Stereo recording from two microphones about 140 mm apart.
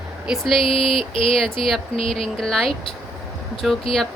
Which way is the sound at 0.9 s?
40° left (ahead or behind).